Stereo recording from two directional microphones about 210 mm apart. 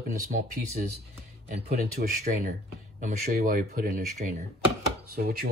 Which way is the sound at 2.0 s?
45° right (ahead or behind).